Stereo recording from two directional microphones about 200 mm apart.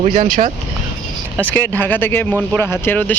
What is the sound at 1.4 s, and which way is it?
Speech, 10° left (ahead or behind).